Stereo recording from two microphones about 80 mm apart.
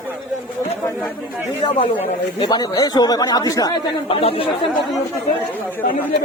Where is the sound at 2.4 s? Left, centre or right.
Left.